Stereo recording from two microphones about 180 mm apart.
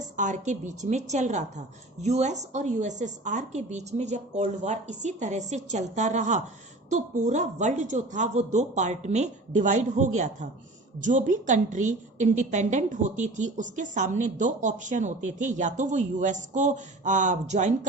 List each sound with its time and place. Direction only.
0.2 s a woman's voice: 45° right (ahead or behind)